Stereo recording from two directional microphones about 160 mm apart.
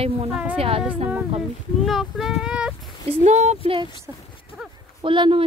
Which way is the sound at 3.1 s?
45° right (ahead or behind).